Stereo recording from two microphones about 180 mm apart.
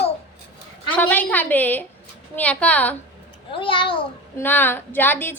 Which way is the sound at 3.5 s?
30° left (ahead or behind).